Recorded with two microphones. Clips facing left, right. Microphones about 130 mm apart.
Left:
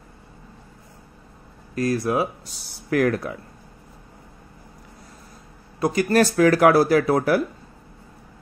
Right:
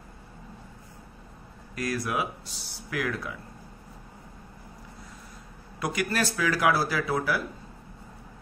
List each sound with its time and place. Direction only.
1.8 s speech: 30° left (ahead or behind)
2.9 s speech: 50° left (ahead or behind)
5.8 s speech: 30° left (ahead or behind)
6.0 s speech: 50° left (ahead or behind)